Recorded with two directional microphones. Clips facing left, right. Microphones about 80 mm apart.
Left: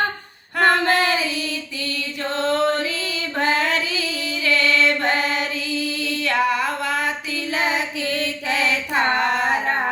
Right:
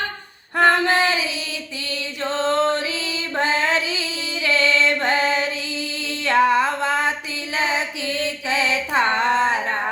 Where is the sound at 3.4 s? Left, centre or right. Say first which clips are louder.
Even; right.